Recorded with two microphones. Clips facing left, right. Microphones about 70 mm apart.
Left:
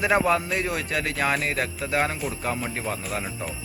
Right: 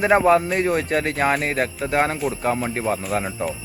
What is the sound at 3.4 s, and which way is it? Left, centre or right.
Speech, right.